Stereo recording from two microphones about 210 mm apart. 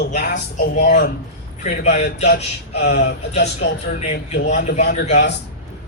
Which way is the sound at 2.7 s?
50° left (ahead or behind).